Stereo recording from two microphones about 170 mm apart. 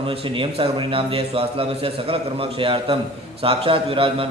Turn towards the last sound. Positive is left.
turn(degrees=-35)  # may be behind; listen again after turning